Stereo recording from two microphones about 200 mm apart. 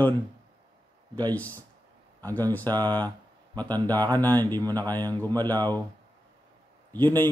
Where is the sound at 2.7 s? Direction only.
20° right (ahead or behind).